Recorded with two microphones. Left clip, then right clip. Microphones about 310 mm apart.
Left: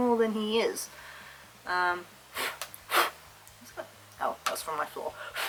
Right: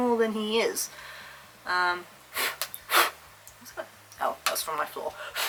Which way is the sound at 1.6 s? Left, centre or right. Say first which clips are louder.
Right 2 dB; centre.